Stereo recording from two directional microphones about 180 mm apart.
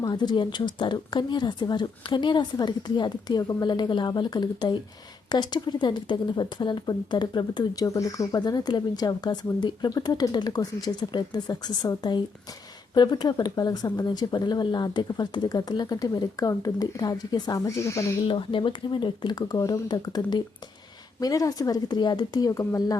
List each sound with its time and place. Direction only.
0.0 s a woman's voice: 25° left (ahead or behind)
18.3 s a woman's voice: 30° left (ahead or behind)